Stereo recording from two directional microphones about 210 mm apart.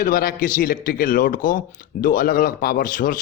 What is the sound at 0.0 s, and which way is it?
A man's voice, 45° left (ahead or behind).